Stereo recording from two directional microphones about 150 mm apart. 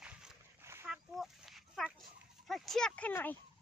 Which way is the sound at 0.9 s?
Centre (ahead or behind).